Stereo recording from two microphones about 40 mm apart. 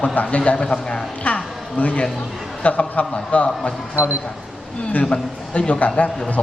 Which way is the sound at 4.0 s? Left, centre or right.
Left.